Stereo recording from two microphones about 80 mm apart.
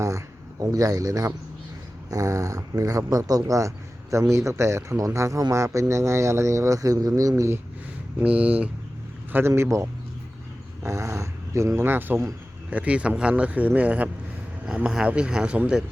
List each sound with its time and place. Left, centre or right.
0.6 s speech: right
8.2 s speech: centre
9.6 s speech: right
10.8 s speech: right; by 15.8 s centre